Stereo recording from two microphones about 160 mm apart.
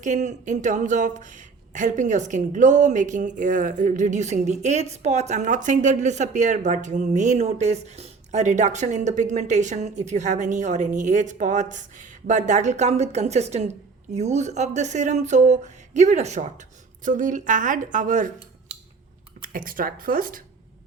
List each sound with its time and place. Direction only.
0.0 s speech: 50° right (ahead or behind)
19.4 s speech: 60° right (ahead or behind)